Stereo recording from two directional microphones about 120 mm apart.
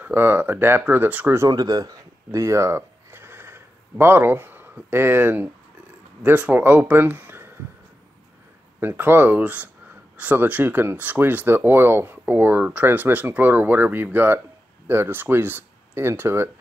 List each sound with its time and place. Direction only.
0.0 s speech: 15° right (ahead or behind)
1.5 s speech: 30° right (ahead or behind)
8.7 s speech: 15° right (ahead or behind)